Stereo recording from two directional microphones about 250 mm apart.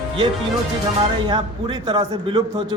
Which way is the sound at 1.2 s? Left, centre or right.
Centre.